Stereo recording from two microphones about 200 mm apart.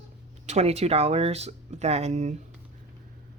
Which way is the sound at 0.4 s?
35° right (ahead or behind).